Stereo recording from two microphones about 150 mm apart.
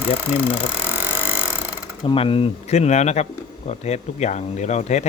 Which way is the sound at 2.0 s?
35° left (ahead or behind).